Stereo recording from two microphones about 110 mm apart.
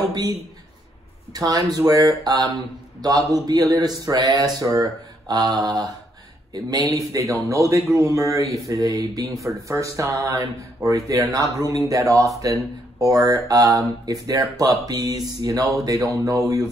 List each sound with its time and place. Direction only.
0.0 s speech: 35° right (ahead or behind)
1.3 s speech: 35° right (ahead or behind)